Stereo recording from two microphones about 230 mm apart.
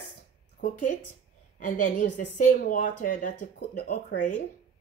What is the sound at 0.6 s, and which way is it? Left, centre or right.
A woman's voice, left.